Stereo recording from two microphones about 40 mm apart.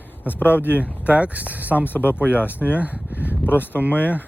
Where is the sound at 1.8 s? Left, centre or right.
Left.